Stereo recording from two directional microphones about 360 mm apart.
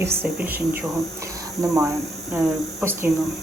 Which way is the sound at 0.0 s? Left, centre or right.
Centre.